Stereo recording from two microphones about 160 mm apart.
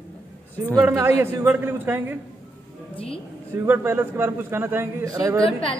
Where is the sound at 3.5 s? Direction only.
15° right (ahead or behind).